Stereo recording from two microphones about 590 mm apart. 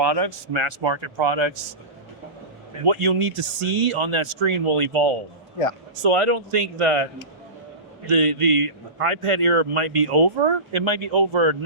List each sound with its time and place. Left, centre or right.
0.0 s a man's voice: right
2.8 s a man's voice: right
3.2 s a man's voice: right
8.1 s a man's voice: right